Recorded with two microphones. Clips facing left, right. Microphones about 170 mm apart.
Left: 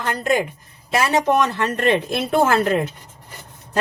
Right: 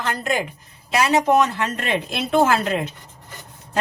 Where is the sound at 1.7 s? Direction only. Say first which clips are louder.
Left 6 dB; 50° left (ahead or behind).